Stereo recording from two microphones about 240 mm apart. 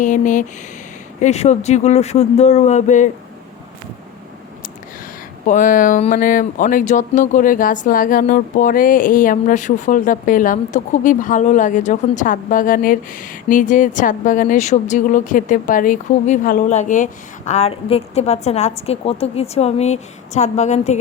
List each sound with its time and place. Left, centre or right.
0.0 s speech: left
5.5 s speech: left